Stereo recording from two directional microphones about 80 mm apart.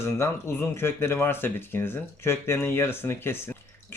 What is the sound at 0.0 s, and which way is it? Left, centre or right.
Speech, left.